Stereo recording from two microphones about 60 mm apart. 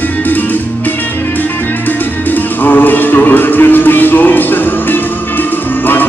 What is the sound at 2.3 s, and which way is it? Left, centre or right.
Music, left.